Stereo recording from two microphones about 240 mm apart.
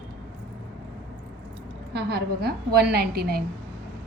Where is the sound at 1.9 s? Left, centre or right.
Right.